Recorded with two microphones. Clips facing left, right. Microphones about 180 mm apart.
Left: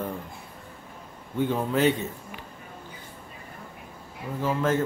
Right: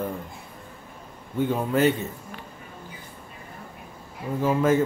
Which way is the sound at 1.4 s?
5° right (ahead or behind).